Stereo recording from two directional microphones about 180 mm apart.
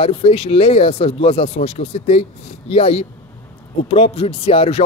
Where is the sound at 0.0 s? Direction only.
30° left (ahead or behind).